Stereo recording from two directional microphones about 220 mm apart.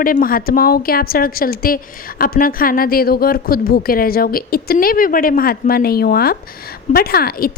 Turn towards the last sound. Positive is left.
turn(degrees=45)  # may be behind; listen again after turning